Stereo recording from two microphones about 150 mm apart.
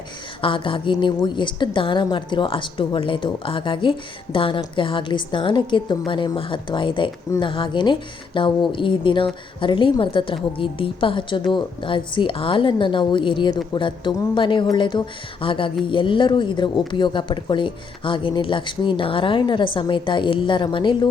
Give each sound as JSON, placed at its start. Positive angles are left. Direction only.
{"t": 0.4, "sound": "speech", "side_deg": 35}